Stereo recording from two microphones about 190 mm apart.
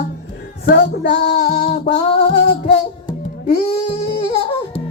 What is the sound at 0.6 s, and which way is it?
Music, 60° left (ahead or behind).